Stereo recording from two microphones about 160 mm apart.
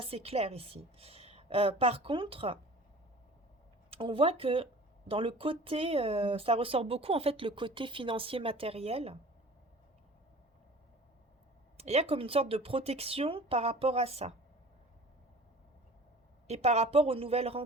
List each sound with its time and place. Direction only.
0.0 s speech: 40° right (ahead or behind)
3.8 s speech: 35° right (ahead or behind)
11.8 s speech: 40° right (ahead or behind)
16.5 s speech: 40° right (ahead or behind)